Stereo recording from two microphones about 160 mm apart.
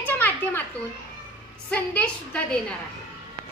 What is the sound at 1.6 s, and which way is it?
Speech, 10° left (ahead or behind).